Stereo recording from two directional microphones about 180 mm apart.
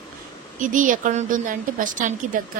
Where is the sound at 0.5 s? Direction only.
45° right (ahead or behind).